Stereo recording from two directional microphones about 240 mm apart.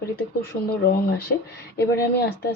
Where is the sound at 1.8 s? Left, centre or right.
Left.